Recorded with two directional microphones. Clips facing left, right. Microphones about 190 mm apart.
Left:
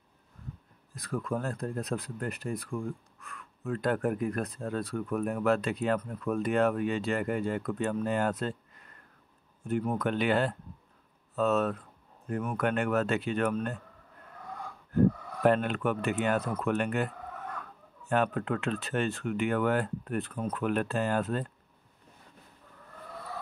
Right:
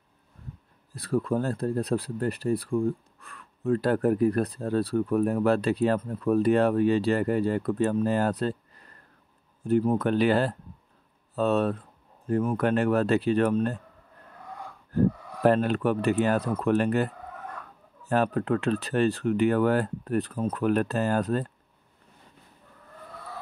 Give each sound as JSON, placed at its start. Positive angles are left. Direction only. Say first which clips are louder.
{"t": 0.9, "sound": "speech", "louder": "right 7 dB", "side_deg": -30}
{"t": 15.0, "sound": "speech", "louder": "right 1 dB", "side_deg": -35}